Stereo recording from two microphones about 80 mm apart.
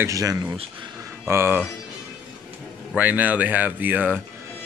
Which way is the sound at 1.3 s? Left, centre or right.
Right.